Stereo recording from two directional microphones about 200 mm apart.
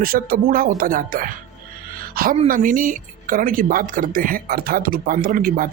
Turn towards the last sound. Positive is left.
turn(degrees=-45)  # may be behind; listen again after turning